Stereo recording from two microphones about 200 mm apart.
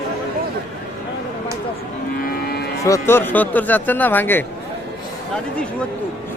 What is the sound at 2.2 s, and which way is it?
Cattle, 50° left (ahead or behind).